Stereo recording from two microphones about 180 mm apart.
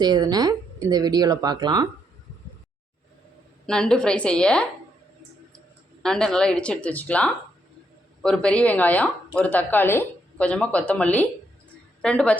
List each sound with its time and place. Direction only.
0.0 s speech: 20° right (ahead or behind)
3.7 s speech: 5° left (ahead or behind)
6.0 s speech: 5° left (ahead or behind)